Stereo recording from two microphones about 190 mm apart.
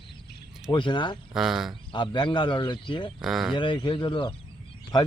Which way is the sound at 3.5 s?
25° left (ahead or behind).